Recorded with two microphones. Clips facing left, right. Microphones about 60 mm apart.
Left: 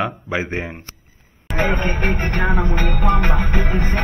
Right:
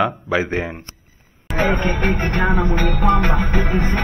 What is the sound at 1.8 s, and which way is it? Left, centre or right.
Speech, left.